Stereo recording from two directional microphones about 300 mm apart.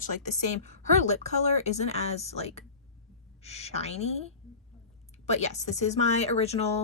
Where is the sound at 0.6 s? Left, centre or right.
Left.